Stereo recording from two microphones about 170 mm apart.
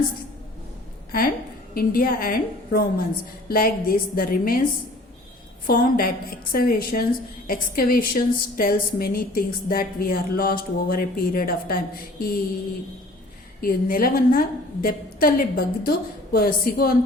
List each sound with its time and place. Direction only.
1.7 s a woman's voice: 60° left (ahead or behind)
5.6 s a woman's voice: 55° left (ahead or behind)
13.6 s a woman's voice: 60° left (ahead or behind)